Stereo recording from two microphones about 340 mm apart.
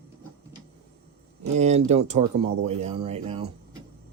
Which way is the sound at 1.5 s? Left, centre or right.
Centre.